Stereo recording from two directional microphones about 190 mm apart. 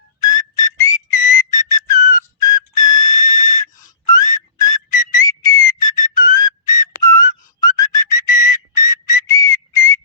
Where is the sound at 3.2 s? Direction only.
45° left (ahead or behind).